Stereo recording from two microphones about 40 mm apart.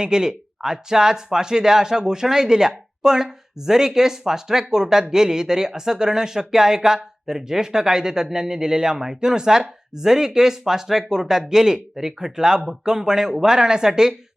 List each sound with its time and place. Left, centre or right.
0.0 s speech: centre